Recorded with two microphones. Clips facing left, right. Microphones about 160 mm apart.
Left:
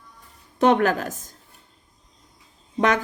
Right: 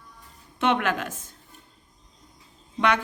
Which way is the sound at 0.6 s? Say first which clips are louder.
Left 6 dB; 40° left (ahead or behind).